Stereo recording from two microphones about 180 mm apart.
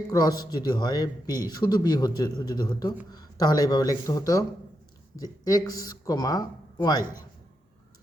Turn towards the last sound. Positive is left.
turn(degrees=20)  # may be behind; listen again after turning